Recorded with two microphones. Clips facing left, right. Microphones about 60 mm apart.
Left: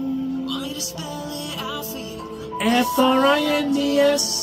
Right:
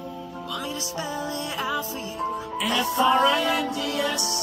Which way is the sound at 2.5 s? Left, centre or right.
Left.